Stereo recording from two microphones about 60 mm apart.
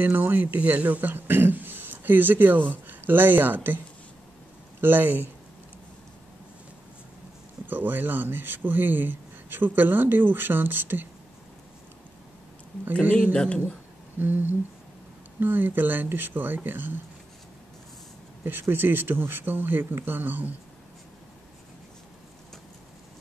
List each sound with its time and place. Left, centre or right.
0.0 s a man's voice: right
7.6 s a man's voice: right
13.1 s speech: centre
14.2 s a man's voice: right
18.4 s a man's voice: right